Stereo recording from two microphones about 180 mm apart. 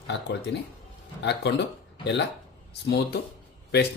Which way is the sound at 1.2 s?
75° left (ahead or behind).